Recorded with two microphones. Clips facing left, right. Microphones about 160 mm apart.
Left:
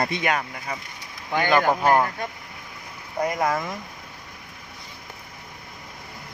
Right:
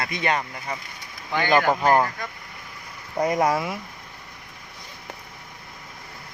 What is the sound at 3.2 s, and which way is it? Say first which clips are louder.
Speech: right 3 dB; 25° right (ahead or behind).